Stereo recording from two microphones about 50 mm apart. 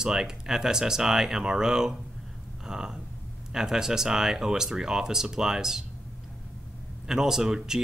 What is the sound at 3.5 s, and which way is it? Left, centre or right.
Speech, centre.